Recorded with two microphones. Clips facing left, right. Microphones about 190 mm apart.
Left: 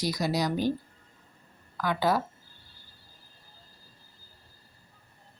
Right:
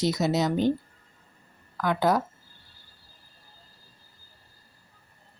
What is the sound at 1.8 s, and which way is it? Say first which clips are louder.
Speech: right 3 dB; 20° right (ahead or behind).